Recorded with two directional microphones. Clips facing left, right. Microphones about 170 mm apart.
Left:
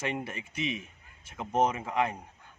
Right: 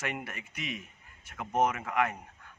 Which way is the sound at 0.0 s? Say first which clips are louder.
Left 3 dB; 30° left (ahead or behind).